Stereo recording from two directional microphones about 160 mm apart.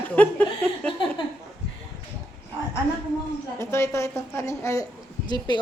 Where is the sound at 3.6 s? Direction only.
15° left (ahead or behind).